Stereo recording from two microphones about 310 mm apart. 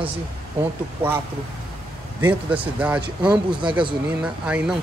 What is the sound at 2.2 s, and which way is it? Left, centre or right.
Speech, centre.